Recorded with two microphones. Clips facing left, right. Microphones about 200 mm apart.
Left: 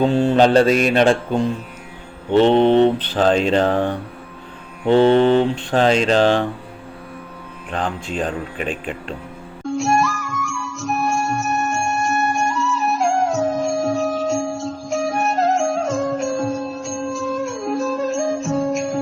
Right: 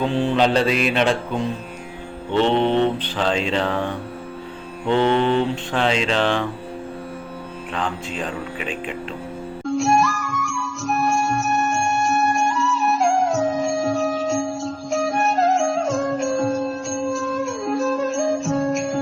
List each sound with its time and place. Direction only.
0.0 s mantra: 45° left (ahead or behind)
4.9 s mantra: 35° left (ahead or behind)
7.7 s mantra: 45° left (ahead or behind)
9.6 s music: centre (ahead or behind)